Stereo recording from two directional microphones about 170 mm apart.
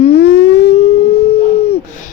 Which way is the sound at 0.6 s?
35° left (ahead or behind).